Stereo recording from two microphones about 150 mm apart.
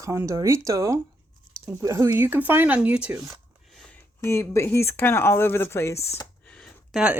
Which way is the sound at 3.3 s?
Centre (ahead or behind).